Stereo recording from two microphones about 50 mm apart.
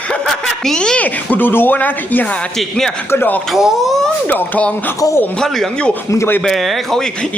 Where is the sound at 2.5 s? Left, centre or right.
Centre.